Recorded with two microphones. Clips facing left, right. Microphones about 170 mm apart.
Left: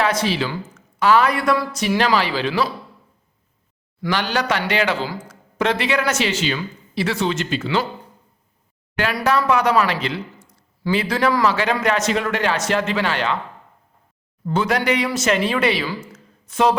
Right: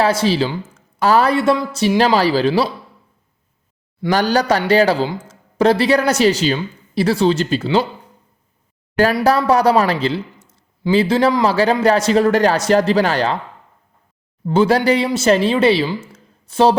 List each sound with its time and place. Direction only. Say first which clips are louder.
0.0 s speech: right 5 dB; 30° right (ahead or behind)
4.1 s speech: right 6 dB; 40° right (ahead or behind)
5.0 s speech: right 4 dB; 25° right (ahead or behind)
9.1 s speech: even; 30° right (ahead or behind)
14.4 s speech: right 6 dB; 30° right (ahead or behind)
16.1 s a sound: right 5 dB; 30° right (ahead or behind)